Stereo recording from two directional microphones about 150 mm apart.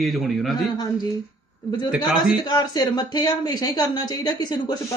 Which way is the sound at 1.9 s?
Centre (ahead or behind).